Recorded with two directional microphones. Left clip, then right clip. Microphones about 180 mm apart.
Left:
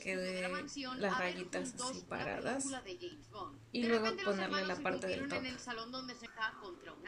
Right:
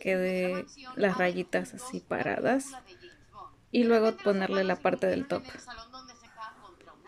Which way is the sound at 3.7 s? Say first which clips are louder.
Right 10 dB; 50° right (ahead or behind).